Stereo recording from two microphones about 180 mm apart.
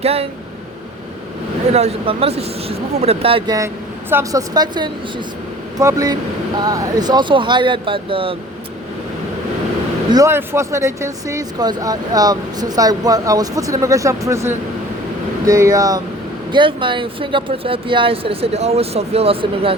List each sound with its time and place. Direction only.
0.0 s speech: 35° right (ahead or behind)
1.7 s speech: 35° right (ahead or behind)
10.1 s speech: 15° right (ahead or behind)